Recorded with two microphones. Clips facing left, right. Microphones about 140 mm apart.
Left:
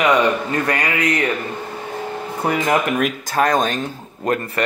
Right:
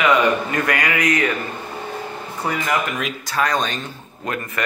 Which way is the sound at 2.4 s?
55° left (ahead or behind).